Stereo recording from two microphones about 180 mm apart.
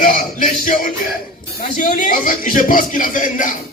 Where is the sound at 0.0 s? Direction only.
50° left (ahead or behind).